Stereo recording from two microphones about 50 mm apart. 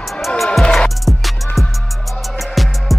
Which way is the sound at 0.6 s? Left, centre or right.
Centre.